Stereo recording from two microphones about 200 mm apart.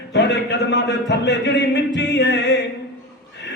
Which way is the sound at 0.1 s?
60° left (ahead or behind).